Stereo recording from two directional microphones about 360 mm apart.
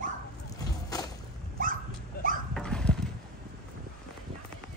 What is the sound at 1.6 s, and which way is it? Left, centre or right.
Dog, right.